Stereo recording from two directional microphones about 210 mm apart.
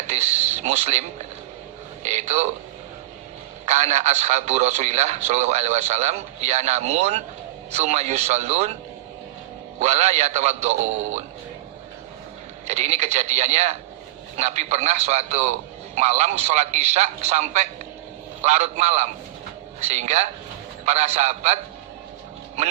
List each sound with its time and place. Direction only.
0.1 s speech: 30° right (ahead or behind)
3.7 s speech: 30° right (ahead or behind)
9.8 s speech: 30° right (ahead or behind)
12.6 s speech: 30° right (ahead or behind)